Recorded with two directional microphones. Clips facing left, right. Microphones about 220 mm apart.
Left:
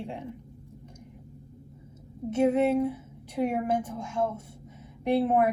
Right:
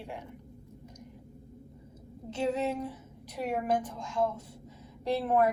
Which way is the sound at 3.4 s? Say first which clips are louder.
Left 3 dB; 25° left (ahead or behind).